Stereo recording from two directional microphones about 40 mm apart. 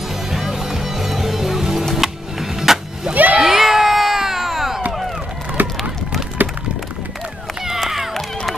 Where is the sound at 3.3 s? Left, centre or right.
Centre.